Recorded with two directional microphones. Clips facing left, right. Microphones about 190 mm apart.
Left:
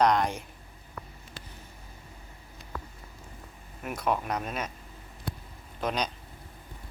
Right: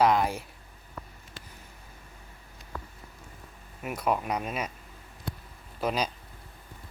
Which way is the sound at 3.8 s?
10° right (ahead or behind).